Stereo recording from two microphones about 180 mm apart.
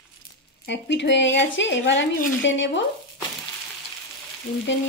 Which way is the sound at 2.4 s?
90° left.